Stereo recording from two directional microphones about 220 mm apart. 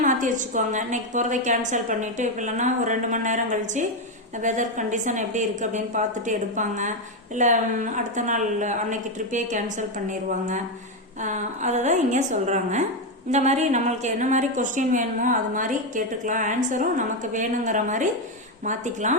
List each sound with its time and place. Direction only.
0.0 s a woman's voice: 35° right (ahead or behind)